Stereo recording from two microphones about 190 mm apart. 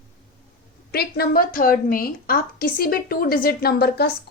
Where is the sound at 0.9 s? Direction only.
55° left (ahead or behind).